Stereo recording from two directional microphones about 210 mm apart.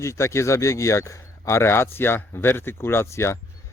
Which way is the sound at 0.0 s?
15° left (ahead or behind).